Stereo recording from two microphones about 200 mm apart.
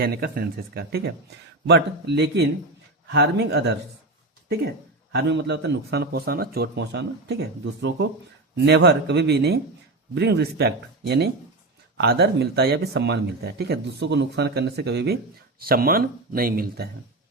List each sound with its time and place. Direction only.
0.0 s a man's voice: 50° right (ahead or behind)